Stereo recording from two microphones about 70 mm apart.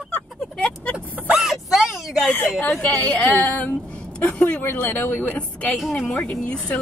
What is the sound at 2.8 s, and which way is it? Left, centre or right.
Speech, left.